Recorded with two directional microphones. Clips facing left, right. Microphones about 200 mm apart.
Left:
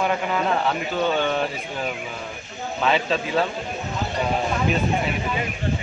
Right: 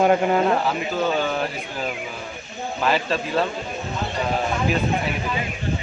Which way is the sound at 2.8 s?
Centre (ahead or behind).